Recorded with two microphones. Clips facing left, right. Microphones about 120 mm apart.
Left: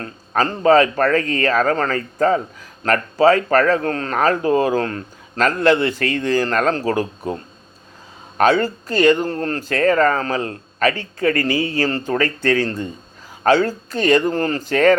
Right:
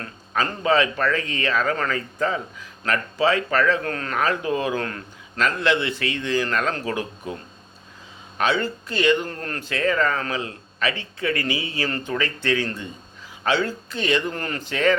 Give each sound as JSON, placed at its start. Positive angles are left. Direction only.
{"t": 0.0, "sound": "a man's voice", "side_deg": 40}
{"t": 8.4, "sound": "a man's voice", "side_deg": 45}